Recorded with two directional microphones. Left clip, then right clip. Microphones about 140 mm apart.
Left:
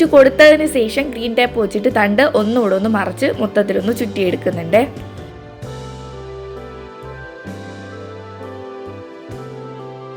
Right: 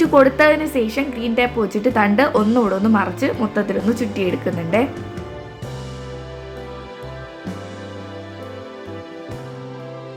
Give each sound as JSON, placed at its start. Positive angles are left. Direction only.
{"t": 0.0, "sound": "a woman's voice", "side_deg": 25}